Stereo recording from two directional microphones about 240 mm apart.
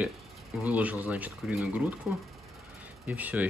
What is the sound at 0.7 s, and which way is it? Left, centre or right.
Speech, centre.